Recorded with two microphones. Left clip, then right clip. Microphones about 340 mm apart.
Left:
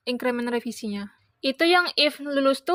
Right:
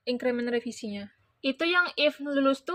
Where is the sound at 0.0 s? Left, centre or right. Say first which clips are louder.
Left 2 dB; left.